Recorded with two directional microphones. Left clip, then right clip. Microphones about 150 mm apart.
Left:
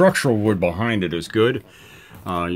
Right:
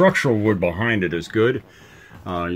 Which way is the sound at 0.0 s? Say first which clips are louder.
Even; 25° left (ahead or behind).